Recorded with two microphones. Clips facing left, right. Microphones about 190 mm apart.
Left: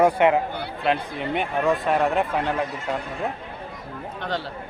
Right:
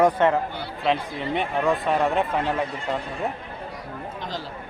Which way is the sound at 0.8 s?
Centre (ahead or behind).